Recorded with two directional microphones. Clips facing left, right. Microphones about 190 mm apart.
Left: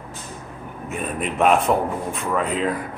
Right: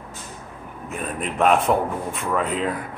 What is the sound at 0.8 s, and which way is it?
A man's voice, 5° left (ahead or behind).